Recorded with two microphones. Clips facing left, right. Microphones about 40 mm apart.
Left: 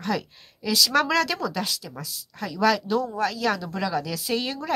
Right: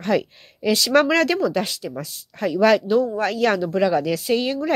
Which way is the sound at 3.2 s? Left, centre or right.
Right.